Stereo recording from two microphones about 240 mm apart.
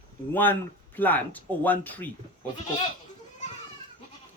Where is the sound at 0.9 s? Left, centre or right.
Centre.